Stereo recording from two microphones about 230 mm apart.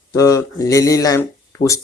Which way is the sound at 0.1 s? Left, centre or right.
Centre.